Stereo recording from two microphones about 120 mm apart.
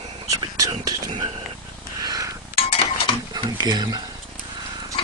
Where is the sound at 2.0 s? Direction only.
30° right (ahead or behind).